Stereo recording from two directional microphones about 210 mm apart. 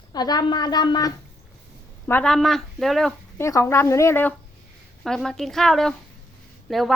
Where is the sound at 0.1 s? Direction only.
20° left (ahead or behind).